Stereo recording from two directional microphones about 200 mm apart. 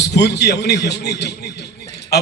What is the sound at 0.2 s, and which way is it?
A man's voice, 55° left (ahead or behind).